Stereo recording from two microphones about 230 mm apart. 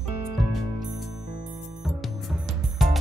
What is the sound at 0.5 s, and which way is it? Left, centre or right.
Music, centre.